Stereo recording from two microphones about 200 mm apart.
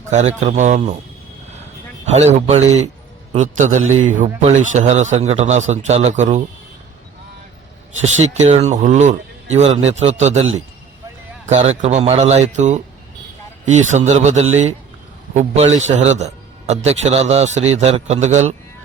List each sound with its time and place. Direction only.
0.3 s a man's voice: 35° right (ahead or behind)
2.0 s a man's voice: 35° right (ahead or behind)
8.3 s a man's voice: 35° right (ahead or behind)
11.4 s a man's voice: 30° right (ahead or behind)